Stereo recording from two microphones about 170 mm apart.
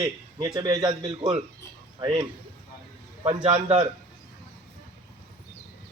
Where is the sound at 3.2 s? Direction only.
35° right (ahead or behind).